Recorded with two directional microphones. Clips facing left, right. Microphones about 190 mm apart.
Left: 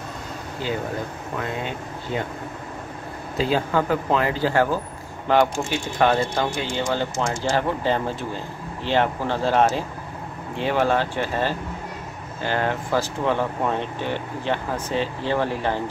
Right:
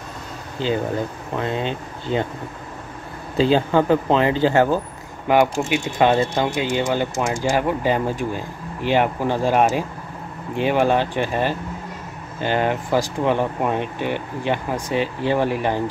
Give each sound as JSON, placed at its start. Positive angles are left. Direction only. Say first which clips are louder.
{"t": 0.6, "sound": "speech", "louder": "right 5 dB", "side_deg": -25}
{"t": 3.3, "sound": "speech", "louder": "right 5 dB", "side_deg": -25}